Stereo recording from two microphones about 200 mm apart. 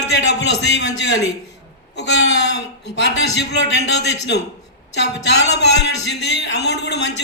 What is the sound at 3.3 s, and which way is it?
A man's voice, 60° left (ahead or behind).